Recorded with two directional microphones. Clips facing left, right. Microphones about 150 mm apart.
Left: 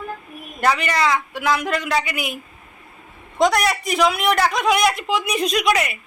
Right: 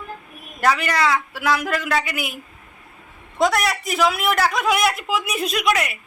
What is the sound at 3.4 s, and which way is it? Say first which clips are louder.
A man's voice: left 2 dB; centre (ahead or behind).